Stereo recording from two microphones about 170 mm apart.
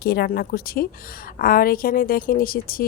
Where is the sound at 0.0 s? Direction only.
65° left (ahead or behind).